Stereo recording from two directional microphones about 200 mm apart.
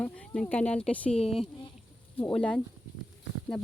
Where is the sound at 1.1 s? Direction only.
30° left (ahead or behind).